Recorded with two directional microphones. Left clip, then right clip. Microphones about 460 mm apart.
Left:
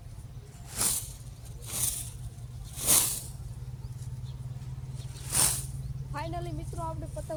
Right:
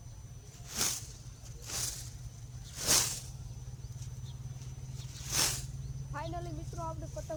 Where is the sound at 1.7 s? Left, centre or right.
Right.